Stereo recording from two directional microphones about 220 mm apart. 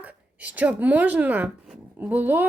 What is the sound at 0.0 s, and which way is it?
Speech, 5° right (ahead or behind).